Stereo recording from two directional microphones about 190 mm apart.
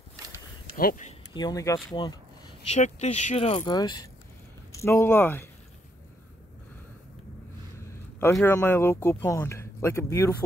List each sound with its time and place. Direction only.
0.7 s speech: 45° left (ahead or behind)
1.3 s speech: 20° left (ahead or behind)
7.8 s a man's voice: 15° left (ahead or behind)